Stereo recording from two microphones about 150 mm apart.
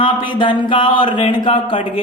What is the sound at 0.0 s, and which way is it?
A man's voice, 35° left (ahead or behind).